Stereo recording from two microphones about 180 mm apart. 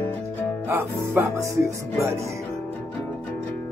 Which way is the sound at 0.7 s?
15° right (ahead or behind).